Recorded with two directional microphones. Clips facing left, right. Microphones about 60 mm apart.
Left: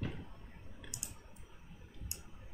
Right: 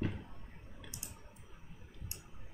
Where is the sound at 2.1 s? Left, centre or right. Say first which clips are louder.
Even; right.